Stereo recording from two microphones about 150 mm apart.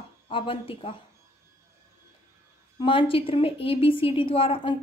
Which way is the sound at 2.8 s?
35° left (ahead or behind).